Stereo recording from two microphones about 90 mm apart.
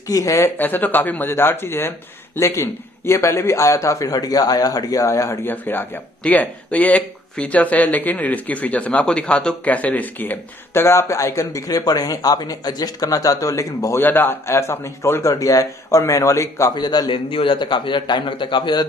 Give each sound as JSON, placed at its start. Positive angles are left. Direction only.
{"t": 0.1, "sound": "a man's voice", "side_deg": 40}
{"t": 0.5, "sound": "a man's voice", "side_deg": 20}
{"t": 5.5, "sound": "speech", "side_deg": 20}
{"t": 13.9, "sound": "speech", "side_deg": 25}
{"t": 15.2, "sound": "a man's voice", "side_deg": 40}
{"t": 16.7, "sound": "a man's voice", "side_deg": 50}
{"t": 17.1, "sound": "a man's voice", "side_deg": 80}